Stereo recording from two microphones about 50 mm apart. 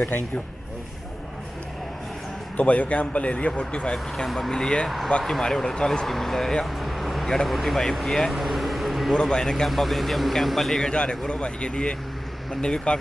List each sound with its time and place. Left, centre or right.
2.5 s speech: left
4.8 s speech: centre
6.6 s music: centre
7.4 s speech: centre
8.3 s vehicle: centre
9.1 s speech: centre
9.7 s speech: centre
10.9 s speech: left